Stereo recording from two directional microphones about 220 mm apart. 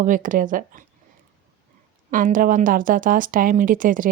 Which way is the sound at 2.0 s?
40° right (ahead or behind).